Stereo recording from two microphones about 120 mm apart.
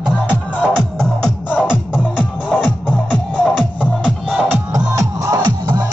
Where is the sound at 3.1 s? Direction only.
5° right (ahead or behind).